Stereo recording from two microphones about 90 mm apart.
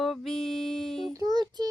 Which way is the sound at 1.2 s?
50° right (ahead or behind).